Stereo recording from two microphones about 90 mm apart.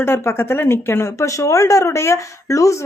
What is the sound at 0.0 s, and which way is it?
Speech, 25° left (ahead or behind).